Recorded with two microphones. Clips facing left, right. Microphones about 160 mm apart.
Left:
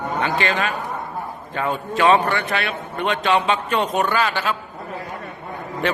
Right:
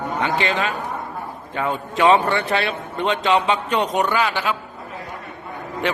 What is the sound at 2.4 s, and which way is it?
A man's voice, 30° right (ahead or behind).